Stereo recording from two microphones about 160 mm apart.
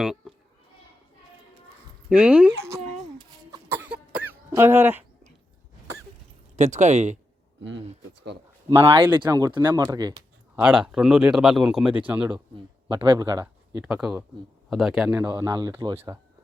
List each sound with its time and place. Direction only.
0.0 s children playing: centre (ahead or behind)
2.0 s speech: 5° right (ahead or behind)
2.6 s cough: 20° right (ahead or behind)
3.8 s cough: 5° right (ahead or behind)
6.6 s speech: 50° right (ahead or behind)
8.8 s speech: 30° right (ahead or behind)
10.5 s speech: 5° right (ahead or behind)
12.9 s speech: 30° right (ahead or behind)
13.8 s speech: 5° right (ahead or behind)
15.4 s speech: 25° right (ahead or behind)